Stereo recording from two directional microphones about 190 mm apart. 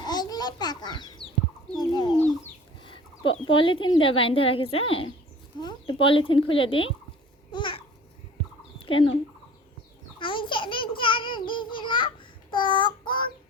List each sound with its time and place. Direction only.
0.0 s a sound: 20° left (ahead or behind)
1.7 s fowl: 20° left (ahead or behind)
2.8 s speech: 25° left (ahead or behind)
7.5 s babbling: 25° left (ahead or behind)
8.8 s fowl: 30° left (ahead or behind)
10.2 s babbling: 25° left (ahead or behind)